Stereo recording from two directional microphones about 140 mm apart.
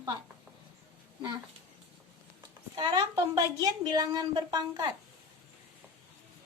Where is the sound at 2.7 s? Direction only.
30° right (ahead or behind).